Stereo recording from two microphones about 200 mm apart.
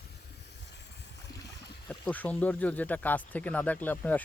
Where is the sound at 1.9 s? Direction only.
5° left (ahead or behind).